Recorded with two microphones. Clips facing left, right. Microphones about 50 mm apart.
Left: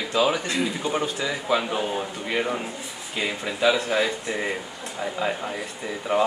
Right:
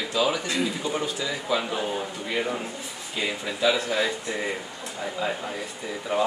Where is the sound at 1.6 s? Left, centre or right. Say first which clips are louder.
Left 2 dB; centre.